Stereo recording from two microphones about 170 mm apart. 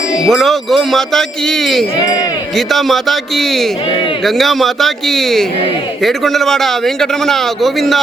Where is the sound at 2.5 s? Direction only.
Centre (ahead or behind).